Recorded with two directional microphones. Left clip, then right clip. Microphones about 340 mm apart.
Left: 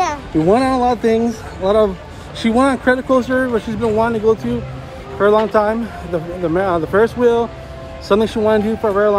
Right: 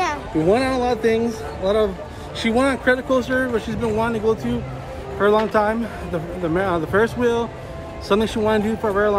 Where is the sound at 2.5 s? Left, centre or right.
Centre.